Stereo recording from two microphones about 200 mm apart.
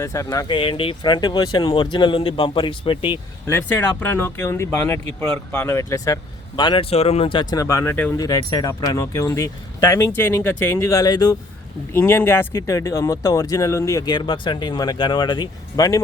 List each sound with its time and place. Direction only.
0.0 s speech: 15° left (ahead or behind)
3.4 s speech: 10° left (ahead or behind)